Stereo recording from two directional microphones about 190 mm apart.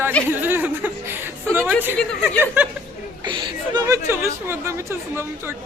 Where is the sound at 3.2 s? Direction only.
25° right (ahead or behind).